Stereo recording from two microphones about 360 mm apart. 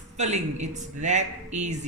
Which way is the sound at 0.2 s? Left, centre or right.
Centre.